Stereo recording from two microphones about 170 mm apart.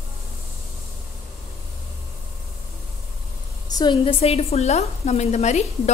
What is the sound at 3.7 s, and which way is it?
A woman's voice, 25° left (ahead or behind).